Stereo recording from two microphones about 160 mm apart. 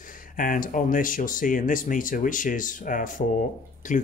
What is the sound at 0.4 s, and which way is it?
Speech, 60° left (ahead or behind).